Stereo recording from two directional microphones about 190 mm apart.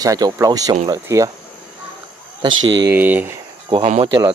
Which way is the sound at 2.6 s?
75° right (ahead or behind).